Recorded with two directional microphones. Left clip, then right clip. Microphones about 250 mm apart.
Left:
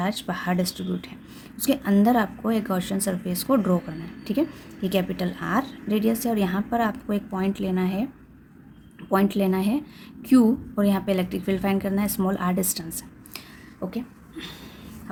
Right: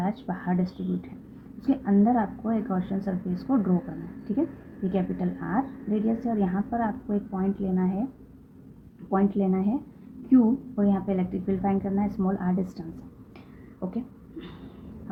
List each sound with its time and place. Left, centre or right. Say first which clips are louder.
0.0 s a woman's voice: left 4 dB; left
9.0 s a woman's voice: left 3 dB; left
13.7 s a sound: left 2 dB; left